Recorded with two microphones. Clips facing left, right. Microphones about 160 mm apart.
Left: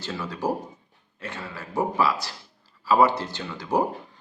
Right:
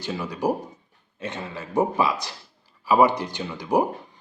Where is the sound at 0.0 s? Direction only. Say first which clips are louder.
Right 3 dB; 15° right (ahead or behind).